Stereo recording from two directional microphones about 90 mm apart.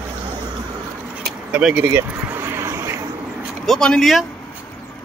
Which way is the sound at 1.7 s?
25° right (ahead or behind).